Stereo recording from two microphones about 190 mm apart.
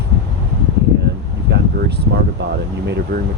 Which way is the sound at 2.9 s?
60° right (ahead or behind).